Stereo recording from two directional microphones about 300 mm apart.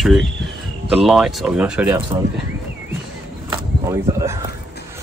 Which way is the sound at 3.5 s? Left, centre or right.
Centre.